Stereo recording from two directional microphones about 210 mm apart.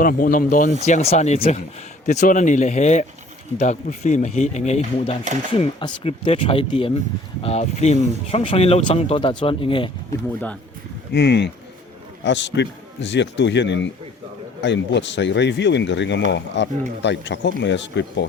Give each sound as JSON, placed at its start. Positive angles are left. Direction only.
{"t": 0.0, "sound": "speech", "side_deg": 40}
{"t": 11.1, "sound": "speech", "side_deg": 55}